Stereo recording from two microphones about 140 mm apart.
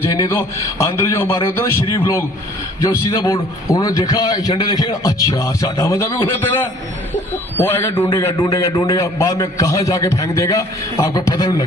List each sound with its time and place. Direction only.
0.1 s a man's voice: 25° left (ahead or behind)